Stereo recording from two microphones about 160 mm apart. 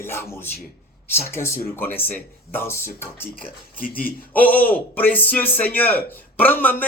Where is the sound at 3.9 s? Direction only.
10° left (ahead or behind).